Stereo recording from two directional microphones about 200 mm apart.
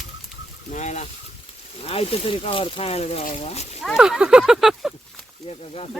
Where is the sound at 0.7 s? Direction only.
35° left (ahead or behind).